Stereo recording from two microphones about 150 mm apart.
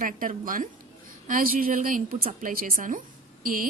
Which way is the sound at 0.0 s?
70° right (ahead or behind).